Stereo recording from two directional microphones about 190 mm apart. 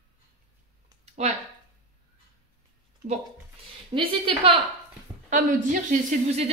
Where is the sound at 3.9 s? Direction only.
25° right (ahead or behind).